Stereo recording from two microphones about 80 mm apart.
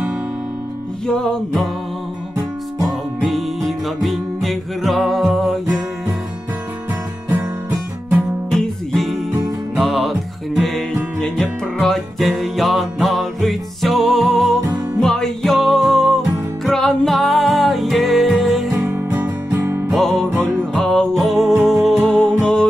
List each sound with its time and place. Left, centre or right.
1.0 s music: centre
3.3 s music: centre
8.5 s music: centre
18.9 s music: right
19.9 s music: centre